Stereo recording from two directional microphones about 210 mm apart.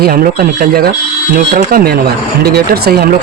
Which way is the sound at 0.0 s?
45° right (ahead or behind).